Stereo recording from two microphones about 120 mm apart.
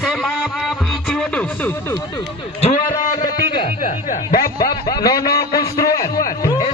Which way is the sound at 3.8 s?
90° left.